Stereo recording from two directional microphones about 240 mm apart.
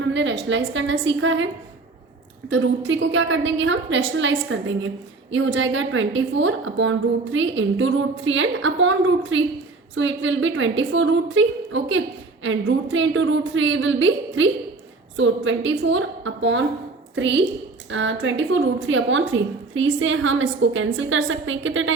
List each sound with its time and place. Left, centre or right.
0.0 s a woman's voice: right
2.5 s a woman's voice: right